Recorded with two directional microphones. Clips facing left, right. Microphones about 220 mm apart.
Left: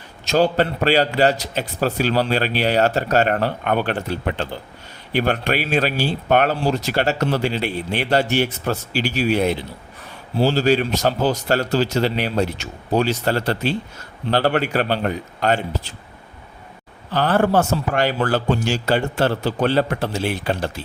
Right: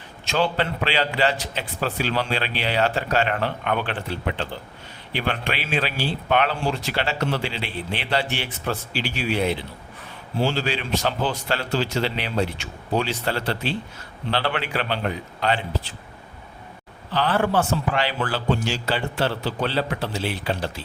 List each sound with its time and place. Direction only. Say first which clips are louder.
0.3 s speech: left 6 dB; 40° left (ahead or behind)
17.1 s speech: left 4 dB; 45° left (ahead or behind)